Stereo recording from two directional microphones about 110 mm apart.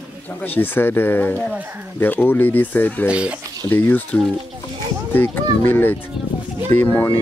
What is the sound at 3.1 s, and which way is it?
Speech, 10° right (ahead or behind).